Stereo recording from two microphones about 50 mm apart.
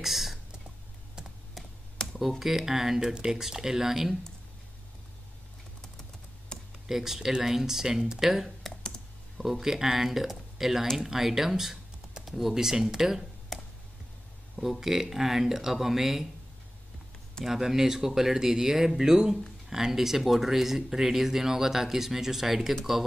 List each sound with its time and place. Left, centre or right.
0.0 s whispering: centre
2.1 s speech: centre
6.5 s computer keyboard: centre
6.9 s speech: centre
13.5 s a sound: centre
14.6 s speech: centre
17.5 s speech: centre